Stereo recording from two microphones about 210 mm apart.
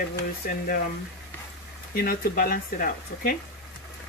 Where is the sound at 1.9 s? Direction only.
40° left (ahead or behind).